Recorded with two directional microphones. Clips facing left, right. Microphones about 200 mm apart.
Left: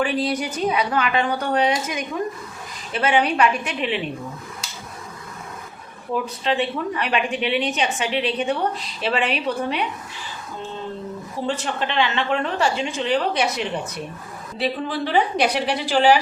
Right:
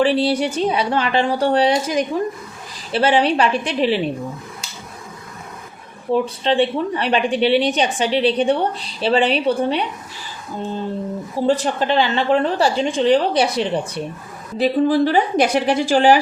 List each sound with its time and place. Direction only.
0.0 s a woman's voice: 30° right (ahead or behind)
6.1 s a woman's voice: 30° right (ahead or behind)
11.4 s a woman's voice: 35° right (ahead or behind)
14.6 s a woman's voice: 45° right (ahead or behind)